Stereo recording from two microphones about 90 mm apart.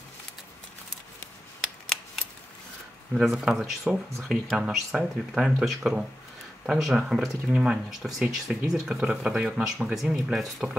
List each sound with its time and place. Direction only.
3.2 s speech: 5° right (ahead or behind)